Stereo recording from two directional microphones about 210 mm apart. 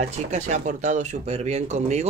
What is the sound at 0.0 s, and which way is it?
Speech, 35° right (ahead or behind).